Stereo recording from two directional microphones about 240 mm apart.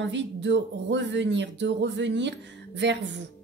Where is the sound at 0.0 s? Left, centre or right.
Right.